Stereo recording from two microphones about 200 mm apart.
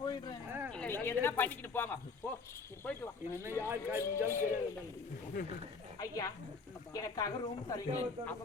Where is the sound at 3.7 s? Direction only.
10° right (ahead or behind).